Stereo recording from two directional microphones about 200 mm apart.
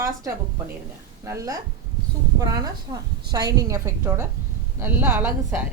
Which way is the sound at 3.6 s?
15° right (ahead or behind).